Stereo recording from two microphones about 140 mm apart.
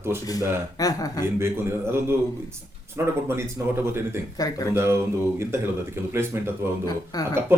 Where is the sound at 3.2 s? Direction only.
15° right (ahead or behind).